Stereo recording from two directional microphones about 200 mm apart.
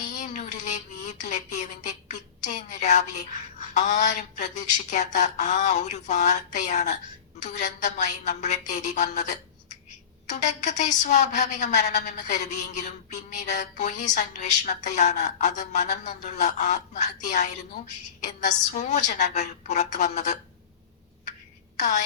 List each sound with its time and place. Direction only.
0.1 s a woman's voice: 35° left (ahead or behind)
21.8 s a woman's voice: 35° left (ahead or behind)